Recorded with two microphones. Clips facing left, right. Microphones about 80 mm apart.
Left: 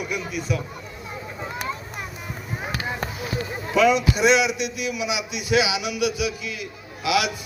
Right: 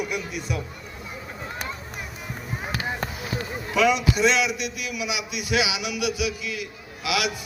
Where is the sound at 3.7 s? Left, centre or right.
Centre.